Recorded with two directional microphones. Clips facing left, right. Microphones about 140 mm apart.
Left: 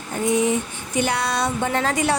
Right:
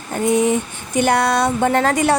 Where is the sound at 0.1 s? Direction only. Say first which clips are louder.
Right 4 dB; 55° right (ahead or behind).